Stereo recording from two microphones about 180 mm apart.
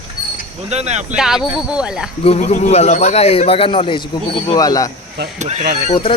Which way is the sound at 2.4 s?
45° left (ahead or behind).